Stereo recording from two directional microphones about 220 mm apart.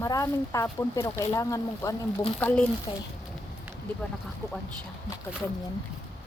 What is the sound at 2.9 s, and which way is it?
Speech, 25° left (ahead or behind).